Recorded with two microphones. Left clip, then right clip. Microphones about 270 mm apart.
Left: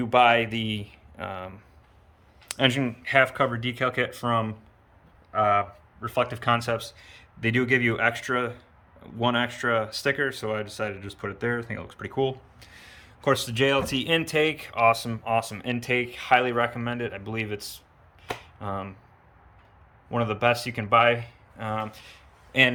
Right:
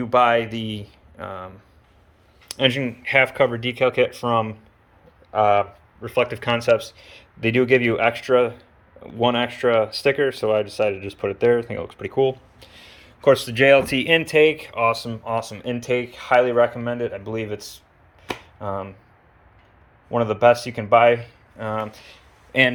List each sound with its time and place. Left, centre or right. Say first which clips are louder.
0.0 s speech: right 2 dB; centre
3.3 s speech: right 6 dB; left
4.1 s speech: right 5 dB; centre
6.0 s speech: right 5 dB; centre
20.1 s speech: right 8 dB; centre